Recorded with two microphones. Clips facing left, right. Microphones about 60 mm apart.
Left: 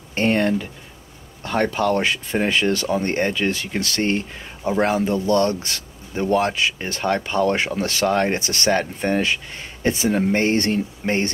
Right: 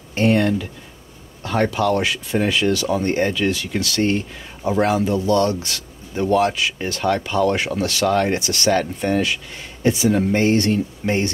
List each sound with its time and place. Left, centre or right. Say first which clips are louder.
0.1 s speech: right 2 dB; left
1.7 s speech: right 1 dB; left